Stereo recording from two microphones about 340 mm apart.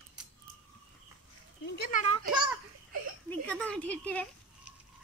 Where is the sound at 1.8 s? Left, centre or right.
Left.